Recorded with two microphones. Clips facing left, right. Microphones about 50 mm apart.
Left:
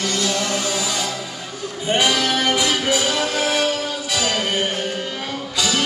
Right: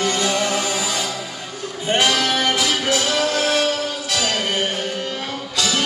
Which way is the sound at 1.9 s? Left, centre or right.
Centre.